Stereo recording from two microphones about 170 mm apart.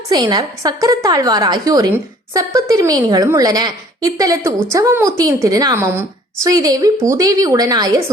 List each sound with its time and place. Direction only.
0.1 s a woman's voice: 25° right (ahead or behind)